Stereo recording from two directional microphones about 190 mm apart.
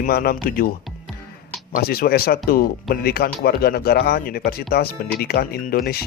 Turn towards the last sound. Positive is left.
turn(degrees=50)  # may be behind; listen again after turning